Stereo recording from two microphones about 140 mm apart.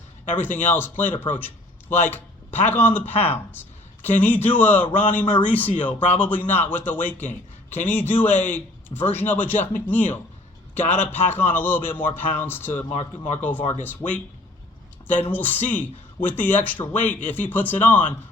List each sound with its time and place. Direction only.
0.3 s a man's voice: 15° left (ahead or behind)
13.0 s speech: 50° left (ahead or behind)
13.4 s a man's voice: 10° left (ahead or behind)
15.3 s a man's voice: 10° left (ahead or behind)